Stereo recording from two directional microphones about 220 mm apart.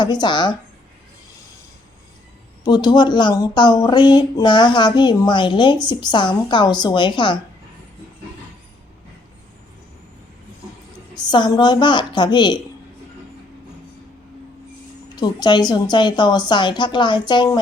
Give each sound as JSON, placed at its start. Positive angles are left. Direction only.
{"t": 0.0, "sound": "speech", "side_deg": 20}
{"t": 2.6, "sound": "speech", "side_deg": 20}
{"t": 11.2, "sound": "speech", "side_deg": 20}
{"t": 15.1, "sound": "speech", "side_deg": 20}